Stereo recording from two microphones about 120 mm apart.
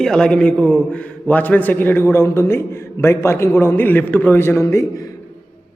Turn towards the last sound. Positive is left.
turn(degrees=25)  # may be behind; listen again after turning